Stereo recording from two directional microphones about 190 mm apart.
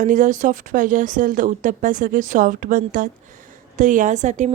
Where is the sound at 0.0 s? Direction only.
40° right (ahead or behind).